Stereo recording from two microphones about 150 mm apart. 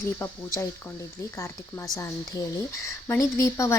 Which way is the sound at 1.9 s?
20° left (ahead or behind).